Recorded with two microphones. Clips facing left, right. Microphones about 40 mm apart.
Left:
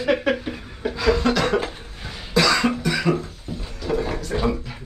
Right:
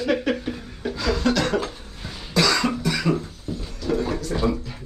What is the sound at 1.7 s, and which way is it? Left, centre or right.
Cough, left.